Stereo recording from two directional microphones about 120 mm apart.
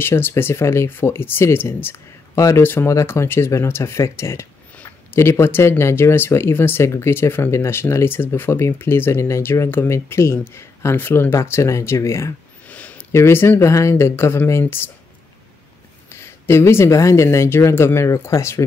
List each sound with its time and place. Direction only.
0.0 s speech: 20° left (ahead or behind)
12.6 s a sound: 10° left (ahead or behind)
13.1 s speech: 20° left (ahead or behind)
16.1 s speech: 20° left (ahead or behind)